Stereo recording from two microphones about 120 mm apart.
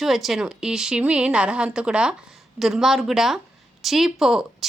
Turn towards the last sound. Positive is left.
turn(degrees=0)  # may be behind; listen again after turning